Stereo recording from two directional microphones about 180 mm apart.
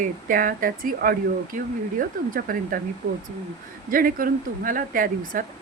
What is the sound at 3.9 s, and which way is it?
A woman's voice, 50° right (ahead or behind).